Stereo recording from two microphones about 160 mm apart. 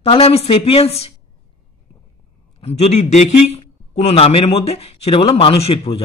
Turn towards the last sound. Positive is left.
turn(degrees=40)  # may be behind; listen again after turning